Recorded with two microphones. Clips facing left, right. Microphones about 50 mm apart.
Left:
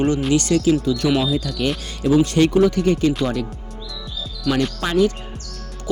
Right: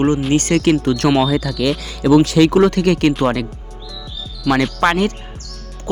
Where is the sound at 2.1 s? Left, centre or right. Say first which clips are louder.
Right 4 dB; right.